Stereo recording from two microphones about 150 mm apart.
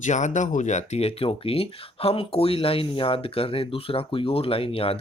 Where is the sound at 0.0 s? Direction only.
50° left (ahead or behind).